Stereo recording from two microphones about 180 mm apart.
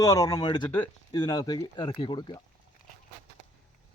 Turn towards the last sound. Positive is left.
turn(degrees=25)  # may be behind; listen again after turning